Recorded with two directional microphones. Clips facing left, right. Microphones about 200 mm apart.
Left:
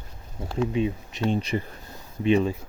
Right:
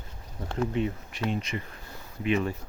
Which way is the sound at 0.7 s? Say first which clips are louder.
Left 3 dB; 15° left (ahead or behind).